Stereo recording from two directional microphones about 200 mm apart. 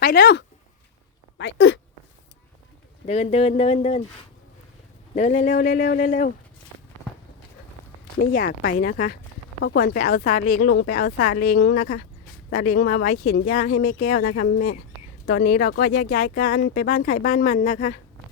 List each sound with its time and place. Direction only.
0.0 s speech: 55° left (ahead or behind)
3.1 s speech: 35° left (ahead or behind)
5.1 s speech: 35° left (ahead or behind)
8.2 s speech: 45° left (ahead or behind)